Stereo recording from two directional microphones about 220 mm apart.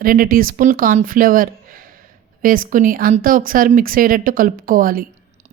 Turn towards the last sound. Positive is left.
turn(degrees=-40)  # may be behind; listen again after turning